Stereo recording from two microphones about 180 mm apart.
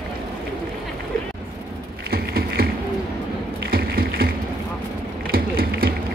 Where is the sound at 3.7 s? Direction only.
55° right (ahead or behind).